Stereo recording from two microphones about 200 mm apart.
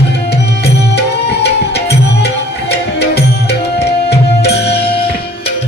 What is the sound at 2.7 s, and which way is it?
Music, 55° left (ahead or behind).